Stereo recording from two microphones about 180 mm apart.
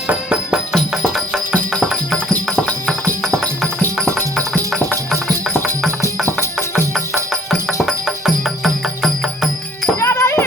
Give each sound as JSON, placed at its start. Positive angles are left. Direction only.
{"t": 0.1, "sound": "music", "side_deg": -5}
{"t": 7.9, "sound": "music", "side_deg": 0}
{"t": 10.0, "sound": "music", "side_deg": 15}